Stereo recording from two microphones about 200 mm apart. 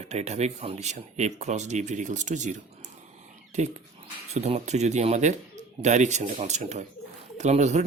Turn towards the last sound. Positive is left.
turn(degrees=-35)  # may be behind; listen again after turning